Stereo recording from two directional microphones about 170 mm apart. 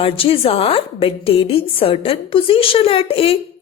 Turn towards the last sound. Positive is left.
turn(degrees=35)  # may be behind; listen again after turning